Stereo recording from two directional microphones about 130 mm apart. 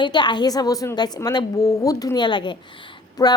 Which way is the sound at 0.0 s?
35° left (ahead or behind).